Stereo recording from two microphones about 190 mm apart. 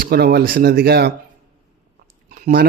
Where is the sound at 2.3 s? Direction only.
55° right (ahead or behind).